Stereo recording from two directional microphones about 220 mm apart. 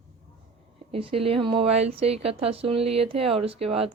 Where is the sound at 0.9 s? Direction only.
25° right (ahead or behind).